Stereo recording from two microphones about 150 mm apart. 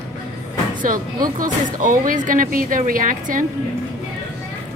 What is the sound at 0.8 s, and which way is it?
A woman's voice, 65° right (ahead or behind).